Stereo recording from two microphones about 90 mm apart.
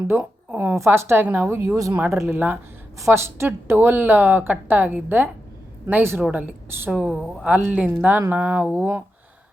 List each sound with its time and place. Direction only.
0.1 s a woman's voice: 25° right (ahead or behind)